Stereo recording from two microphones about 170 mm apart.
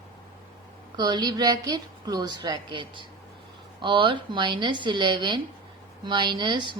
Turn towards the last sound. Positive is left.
turn(degrees=-30)  # may be behind; listen again after turning